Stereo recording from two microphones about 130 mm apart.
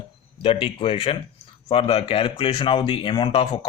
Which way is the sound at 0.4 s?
45° left (ahead or behind).